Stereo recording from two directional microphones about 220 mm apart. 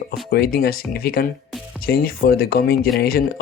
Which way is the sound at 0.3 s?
45° left (ahead or behind).